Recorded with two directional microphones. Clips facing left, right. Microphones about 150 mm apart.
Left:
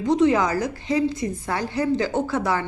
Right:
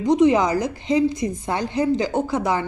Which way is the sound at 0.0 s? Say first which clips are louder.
Right 2 dB; 15° right (ahead or behind).